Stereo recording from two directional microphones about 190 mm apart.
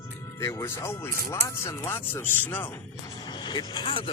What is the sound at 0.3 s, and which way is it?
Speech, 15° left (ahead or behind).